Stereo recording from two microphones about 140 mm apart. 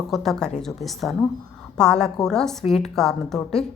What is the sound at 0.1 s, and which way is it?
A woman's voice, centre (ahead or behind).